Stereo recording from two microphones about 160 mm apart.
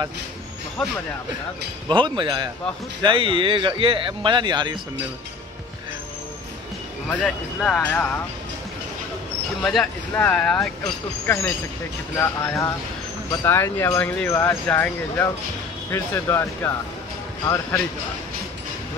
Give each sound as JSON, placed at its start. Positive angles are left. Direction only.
{"t": 0.8, "sound": "speech", "side_deg": 0}
{"t": 1.9, "sound": "speech", "side_deg": -30}
{"t": 7.1, "sound": "speech", "side_deg": 5}
{"t": 9.6, "sound": "speech", "side_deg": 0}